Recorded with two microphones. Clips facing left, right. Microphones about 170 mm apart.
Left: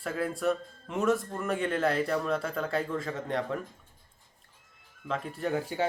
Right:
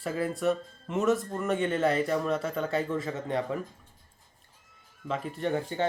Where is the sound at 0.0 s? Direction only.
Centre (ahead or behind).